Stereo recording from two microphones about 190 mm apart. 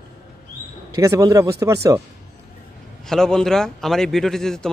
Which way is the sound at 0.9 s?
15° right (ahead or behind).